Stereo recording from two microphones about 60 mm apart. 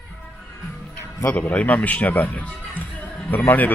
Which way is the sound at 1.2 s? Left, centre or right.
Left.